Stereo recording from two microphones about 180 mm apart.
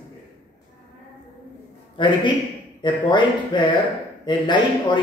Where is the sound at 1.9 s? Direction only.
25° left (ahead or behind).